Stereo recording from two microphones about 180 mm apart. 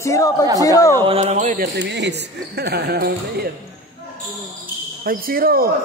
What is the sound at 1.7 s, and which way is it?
Speech, 75° right (ahead or behind).